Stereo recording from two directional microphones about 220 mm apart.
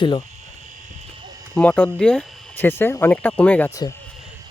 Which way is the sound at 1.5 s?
5° left (ahead or behind).